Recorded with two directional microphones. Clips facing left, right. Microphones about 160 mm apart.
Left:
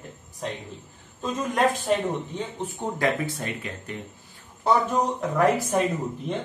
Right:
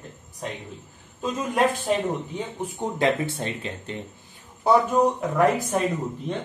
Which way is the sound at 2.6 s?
20° right (ahead or behind).